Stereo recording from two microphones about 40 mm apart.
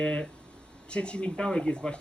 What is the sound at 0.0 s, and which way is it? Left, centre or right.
Speech, left.